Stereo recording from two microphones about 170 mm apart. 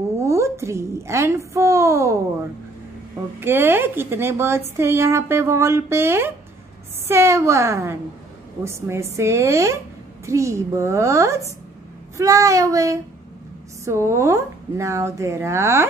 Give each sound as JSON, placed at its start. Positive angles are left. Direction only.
{"t": 0.2, "sound": "a woman's voice", "side_deg": -15}
{"t": 3.3, "sound": "a woman's voice", "side_deg": -10}
{"t": 12.2, "sound": "child singing", "side_deg": -20}
{"t": 13.8, "sound": "a woman's voice", "side_deg": -15}